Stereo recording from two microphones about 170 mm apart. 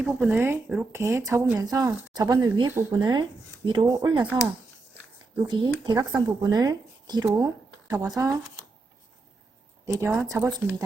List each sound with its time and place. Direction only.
0.0 s speech: 10° right (ahead or behind); by 4.3 s 25° right (ahead or behind)
5.5 s speech: 25° right (ahead or behind)
9.8 s speech: 20° right (ahead or behind)